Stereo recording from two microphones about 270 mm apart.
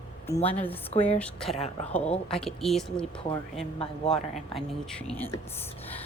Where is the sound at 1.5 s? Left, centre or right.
Left.